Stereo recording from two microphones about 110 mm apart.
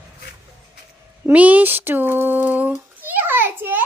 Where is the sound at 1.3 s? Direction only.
15° right (ahead or behind).